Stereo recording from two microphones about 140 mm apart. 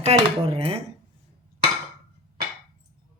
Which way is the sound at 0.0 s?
45° right (ahead or behind).